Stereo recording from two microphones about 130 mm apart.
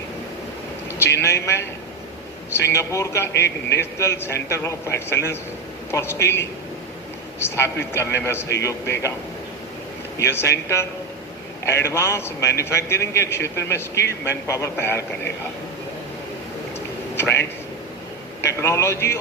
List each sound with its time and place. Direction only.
1.0 s a man's voice: 20° left (ahead or behind)
10.2 s a man's voice: 20° left (ahead or behind)
18.6 s a man's voice: 20° left (ahead or behind)